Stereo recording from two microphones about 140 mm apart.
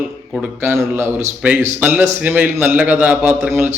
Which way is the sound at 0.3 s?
Centre (ahead or behind).